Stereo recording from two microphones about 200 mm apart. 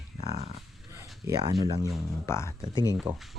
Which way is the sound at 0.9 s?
15° right (ahead or behind).